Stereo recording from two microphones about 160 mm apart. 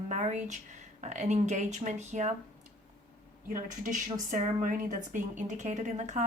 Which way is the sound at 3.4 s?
55° right (ahead or behind).